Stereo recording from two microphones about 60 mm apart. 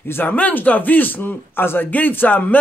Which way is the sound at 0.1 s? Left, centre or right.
Left.